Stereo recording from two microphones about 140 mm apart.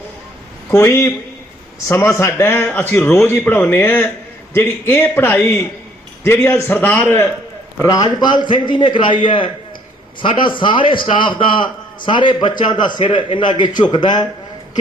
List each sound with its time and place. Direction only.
0.7 s a man's voice: 20° left (ahead or behind)